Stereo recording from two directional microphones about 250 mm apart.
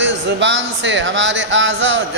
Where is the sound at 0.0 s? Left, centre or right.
Right.